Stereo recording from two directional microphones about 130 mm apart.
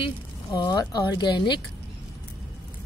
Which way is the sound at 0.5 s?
30° left (ahead or behind).